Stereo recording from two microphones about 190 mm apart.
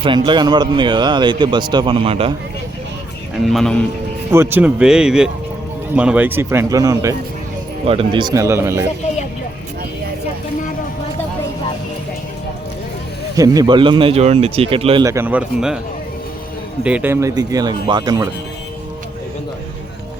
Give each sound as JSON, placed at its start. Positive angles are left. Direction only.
{"t": 0.0, "sound": "a man's voice", "side_deg": -25}
{"t": 3.4, "sound": "speech", "side_deg": 0}
{"t": 4.3, "sound": "a man's voice", "side_deg": -10}
{"t": 7.9, "sound": "a man's voice", "side_deg": -25}
{"t": 13.3, "sound": "a man's voice", "side_deg": -20}
{"t": 15.0, "sound": "a man's voice", "side_deg": -15}
{"t": 16.8, "sound": "a man's voice", "side_deg": -10}